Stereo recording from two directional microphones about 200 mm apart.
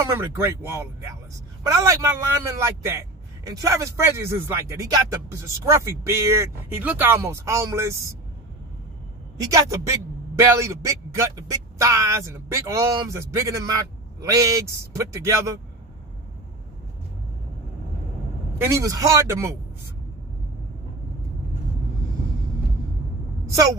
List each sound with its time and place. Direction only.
0.0 s a man's voice: 10° right (ahead or behind)
9.5 s a man's voice: 15° right (ahead or behind)
18.6 s a man's voice: 15° right (ahead or behind)